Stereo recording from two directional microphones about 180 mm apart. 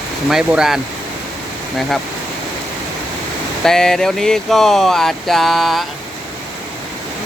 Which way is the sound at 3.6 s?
5° left (ahead or behind).